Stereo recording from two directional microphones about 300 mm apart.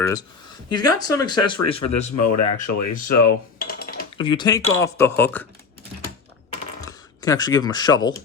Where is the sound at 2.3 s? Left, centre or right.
Left.